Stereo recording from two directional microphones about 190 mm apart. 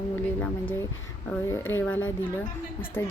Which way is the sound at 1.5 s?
10° left (ahead or behind).